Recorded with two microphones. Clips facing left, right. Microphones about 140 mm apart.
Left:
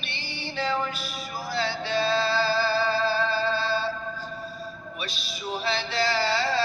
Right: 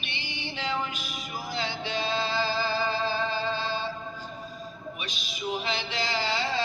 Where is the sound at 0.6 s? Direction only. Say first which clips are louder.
Left 4 dB; 45° left (ahead or behind).